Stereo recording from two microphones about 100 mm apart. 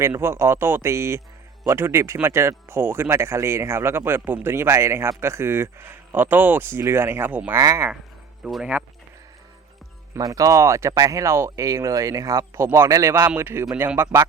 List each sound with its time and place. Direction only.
0.2 s a man's voice: 25° right (ahead or behind)
8.4 s speech: centre (ahead or behind)
10.2 s a man's voice: 35° right (ahead or behind)